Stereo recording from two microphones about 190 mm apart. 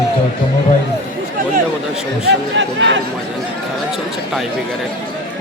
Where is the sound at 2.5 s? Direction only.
70° right (ahead or behind).